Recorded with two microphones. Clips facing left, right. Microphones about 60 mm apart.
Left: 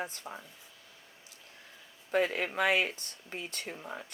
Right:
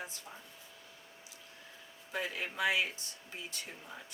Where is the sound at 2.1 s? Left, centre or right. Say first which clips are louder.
Left 9 dB; left.